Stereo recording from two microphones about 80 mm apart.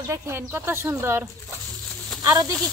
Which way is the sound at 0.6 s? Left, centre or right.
Right.